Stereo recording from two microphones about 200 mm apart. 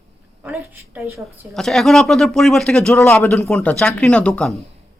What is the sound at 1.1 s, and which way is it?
Speech, centre (ahead or behind).